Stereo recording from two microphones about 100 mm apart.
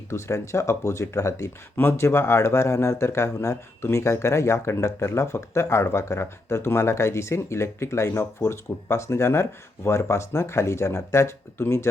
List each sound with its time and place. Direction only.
0.1 s speech: 30° left (ahead or behind)